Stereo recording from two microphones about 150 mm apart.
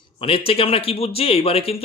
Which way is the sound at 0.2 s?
40° left (ahead or behind).